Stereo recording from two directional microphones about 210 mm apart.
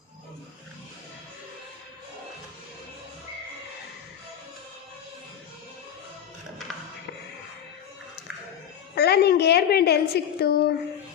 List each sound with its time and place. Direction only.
9.0 s a woman's voice: 50° left (ahead or behind)